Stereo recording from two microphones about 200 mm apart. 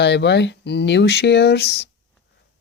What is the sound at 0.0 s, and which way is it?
Speech, 60° left (ahead or behind).